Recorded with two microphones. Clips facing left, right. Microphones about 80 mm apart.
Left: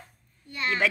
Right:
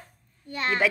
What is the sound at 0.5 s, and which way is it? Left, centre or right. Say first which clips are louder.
Speech: right 2 dB; right.